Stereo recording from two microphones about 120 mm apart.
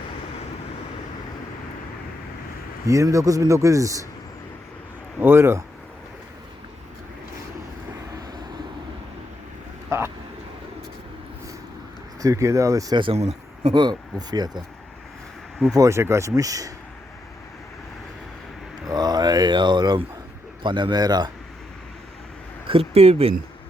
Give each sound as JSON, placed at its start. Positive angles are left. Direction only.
{"t": 2.8, "sound": "a man's voice", "side_deg": -25}
{"t": 5.2, "sound": "a man's voice", "side_deg": -20}
{"t": 12.2, "sound": "a man's voice", "side_deg": -25}
{"t": 13.1, "sound": "speech", "side_deg": -65}
{"t": 13.7, "sound": "speech", "side_deg": -35}
{"t": 15.7, "sound": "a man's voice", "side_deg": -25}
{"t": 18.9, "sound": "a sound", "side_deg": -35}
{"t": 20.7, "sound": "speech", "side_deg": -40}
{"t": 22.6, "sound": "speech", "side_deg": -50}